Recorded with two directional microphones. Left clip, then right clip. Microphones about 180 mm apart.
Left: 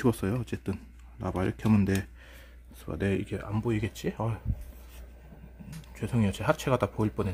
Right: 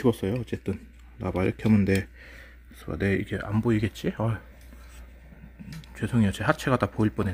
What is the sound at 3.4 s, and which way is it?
Speech, 10° right (ahead or behind).